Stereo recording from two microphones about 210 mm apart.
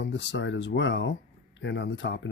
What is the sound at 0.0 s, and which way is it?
Speech, 60° left (ahead or behind).